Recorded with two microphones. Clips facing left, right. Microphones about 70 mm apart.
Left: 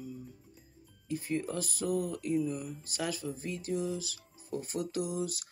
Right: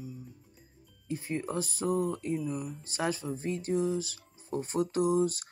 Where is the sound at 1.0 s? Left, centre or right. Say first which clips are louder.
Even; right.